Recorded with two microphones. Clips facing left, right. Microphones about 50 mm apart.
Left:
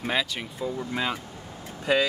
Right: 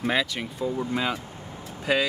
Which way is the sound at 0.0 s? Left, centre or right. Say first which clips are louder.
Right 2 dB; centre.